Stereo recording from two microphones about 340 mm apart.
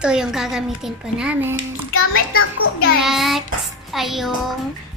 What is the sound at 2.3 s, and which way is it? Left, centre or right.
Speech, left.